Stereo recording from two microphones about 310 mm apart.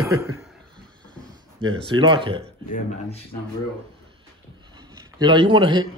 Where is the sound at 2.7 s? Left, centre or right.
Centre.